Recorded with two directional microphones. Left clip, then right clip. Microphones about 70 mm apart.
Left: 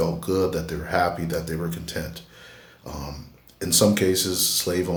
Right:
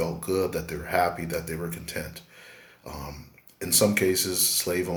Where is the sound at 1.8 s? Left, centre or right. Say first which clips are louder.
Left 3 dB; left.